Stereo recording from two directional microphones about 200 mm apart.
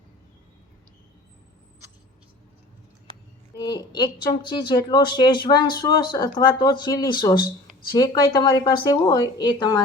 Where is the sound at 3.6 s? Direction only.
20° left (ahead or behind).